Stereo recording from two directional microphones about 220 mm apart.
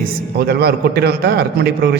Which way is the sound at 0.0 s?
45° right (ahead or behind).